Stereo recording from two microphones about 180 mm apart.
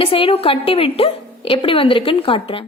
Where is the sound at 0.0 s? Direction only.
30° left (ahead or behind).